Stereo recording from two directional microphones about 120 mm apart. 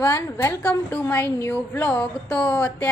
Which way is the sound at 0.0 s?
20° left (ahead or behind).